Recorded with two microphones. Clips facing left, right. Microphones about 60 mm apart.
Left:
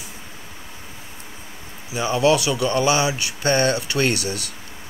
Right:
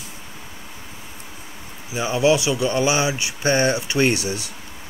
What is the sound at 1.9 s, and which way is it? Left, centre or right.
Speech, centre.